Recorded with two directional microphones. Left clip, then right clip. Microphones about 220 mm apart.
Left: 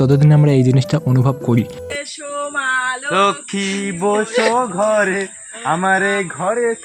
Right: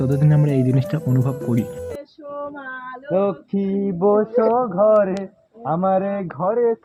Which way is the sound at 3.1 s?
5° left (ahead or behind).